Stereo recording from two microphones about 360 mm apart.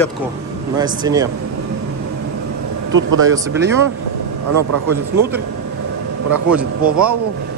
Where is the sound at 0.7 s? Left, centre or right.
Centre.